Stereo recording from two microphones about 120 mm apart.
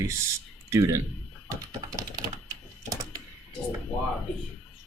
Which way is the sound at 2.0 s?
30° right (ahead or behind).